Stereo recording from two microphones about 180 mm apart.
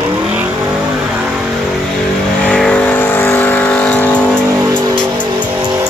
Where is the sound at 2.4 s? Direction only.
5° left (ahead or behind).